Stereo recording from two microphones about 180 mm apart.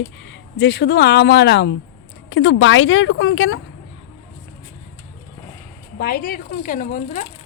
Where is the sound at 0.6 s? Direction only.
70° left (ahead or behind).